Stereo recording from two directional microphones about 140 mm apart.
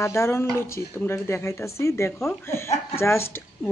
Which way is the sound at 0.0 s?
20° left (ahead or behind).